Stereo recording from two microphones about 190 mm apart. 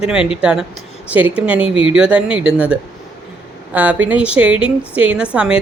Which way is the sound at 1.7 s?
25° left (ahead or behind).